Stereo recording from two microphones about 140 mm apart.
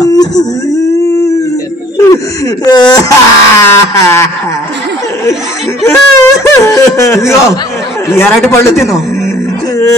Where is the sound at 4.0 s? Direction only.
20° left (ahead or behind).